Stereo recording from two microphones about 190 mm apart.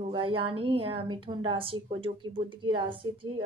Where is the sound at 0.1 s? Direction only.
30° right (ahead or behind).